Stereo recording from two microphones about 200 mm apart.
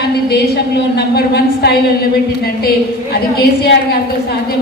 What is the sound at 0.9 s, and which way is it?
Speech, 55° left (ahead or behind).